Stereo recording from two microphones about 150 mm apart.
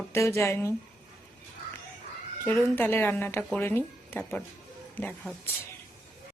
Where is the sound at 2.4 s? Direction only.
15° left (ahead or behind).